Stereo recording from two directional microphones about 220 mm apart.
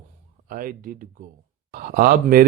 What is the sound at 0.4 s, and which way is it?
Speech, 40° right (ahead or behind).